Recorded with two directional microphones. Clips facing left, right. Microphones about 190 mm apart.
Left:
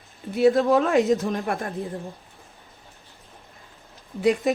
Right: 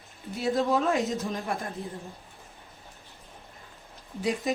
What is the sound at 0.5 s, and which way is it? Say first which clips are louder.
Speech: left 6 dB; 60° left (ahead or behind).